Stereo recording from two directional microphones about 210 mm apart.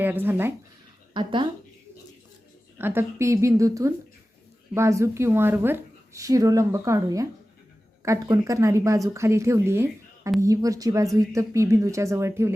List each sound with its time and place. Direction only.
0.0 s a woman's voice: 10° right (ahead or behind)
1.1 s speech: 20° right (ahead or behind)
2.7 s a woman's voice: 10° right (ahead or behind)